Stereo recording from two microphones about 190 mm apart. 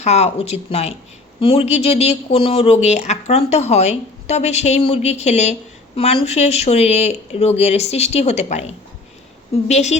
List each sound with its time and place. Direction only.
0.0 s speech: 35° left (ahead or behind)